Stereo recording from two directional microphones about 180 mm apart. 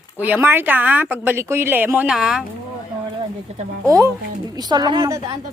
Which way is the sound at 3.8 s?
20° right (ahead or behind).